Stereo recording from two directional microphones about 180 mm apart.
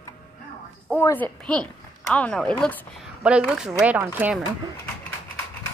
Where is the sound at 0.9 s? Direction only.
10° left (ahead or behind).